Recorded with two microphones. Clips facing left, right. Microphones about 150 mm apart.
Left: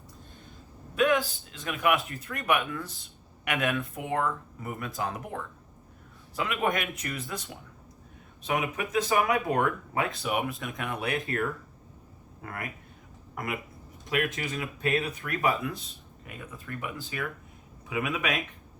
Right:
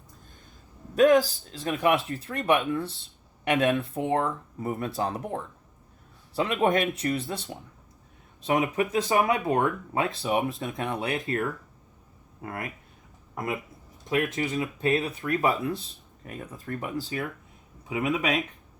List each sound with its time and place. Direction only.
0.9 s speech: 40° right (ahead or behind)
12.4 s speech: 25° right (ahead or behind)
17.8 s speech: 25° right (ahead or behind)